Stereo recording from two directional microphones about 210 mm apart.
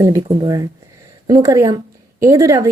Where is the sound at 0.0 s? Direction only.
15° right (ahead or behind).